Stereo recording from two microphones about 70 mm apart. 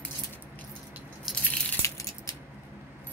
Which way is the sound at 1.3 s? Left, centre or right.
Centre.